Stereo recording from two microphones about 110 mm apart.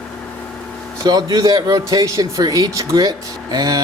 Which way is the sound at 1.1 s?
40° right (ahead or behind).